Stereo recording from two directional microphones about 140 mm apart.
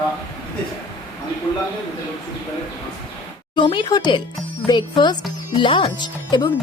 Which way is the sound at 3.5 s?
35° left (ahead or behind).